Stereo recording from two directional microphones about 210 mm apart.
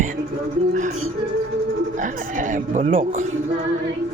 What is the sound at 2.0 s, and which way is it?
Speech, 35° right (ahead or behind).